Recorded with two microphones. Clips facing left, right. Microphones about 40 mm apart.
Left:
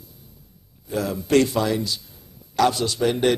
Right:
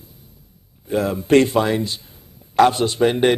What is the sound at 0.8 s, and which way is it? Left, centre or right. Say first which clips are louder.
A man's voice: right 5 dB; right.